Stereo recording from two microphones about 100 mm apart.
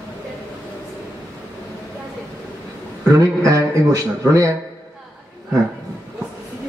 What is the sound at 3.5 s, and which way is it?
A man's voice, 35° right (ahead or behind).